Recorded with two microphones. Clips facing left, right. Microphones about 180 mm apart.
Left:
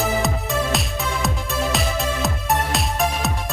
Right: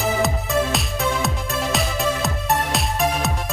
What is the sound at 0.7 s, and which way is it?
Music, centre (ahead or behind).